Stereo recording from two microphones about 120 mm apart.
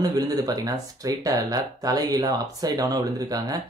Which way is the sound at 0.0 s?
30° right (ahead or behind).